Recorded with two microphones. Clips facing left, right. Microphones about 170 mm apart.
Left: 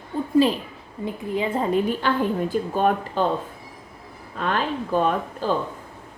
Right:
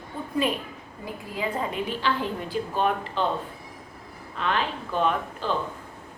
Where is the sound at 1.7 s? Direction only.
50° left (ahead or behind).